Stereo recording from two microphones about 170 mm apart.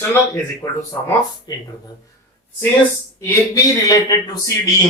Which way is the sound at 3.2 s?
15° left (ahead or behind).